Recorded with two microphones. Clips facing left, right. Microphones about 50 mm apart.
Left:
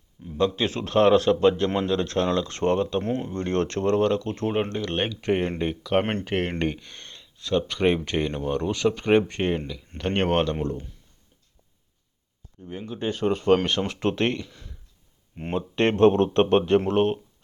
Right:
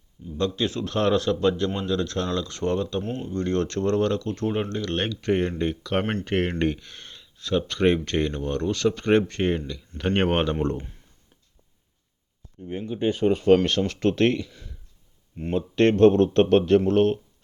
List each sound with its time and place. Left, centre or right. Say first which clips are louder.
0.3 s speech: left 3 dB; centre
0.6 s speech: left 4 dB; left
3.0 s speech: left 3 dB; left
3.3 s speech: right 4 dB; left
3.8 s speech: left 2 dB; centre
10.2 s speech: even; centre
12.9 s speech: right 3 dB; centre
13.7 s speech: right 2 dB; centre
14.4 s a sound: right 1 dB; centre
15.5 s speech: right 3 dB; centre